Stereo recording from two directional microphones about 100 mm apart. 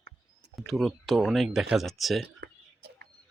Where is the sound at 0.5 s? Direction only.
Centre (ahead or behind).